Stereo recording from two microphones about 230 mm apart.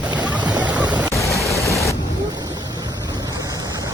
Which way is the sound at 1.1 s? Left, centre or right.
Centre.